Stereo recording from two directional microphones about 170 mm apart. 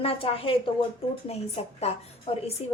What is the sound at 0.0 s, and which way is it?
A woman's voice, 35° left (ahead or behind).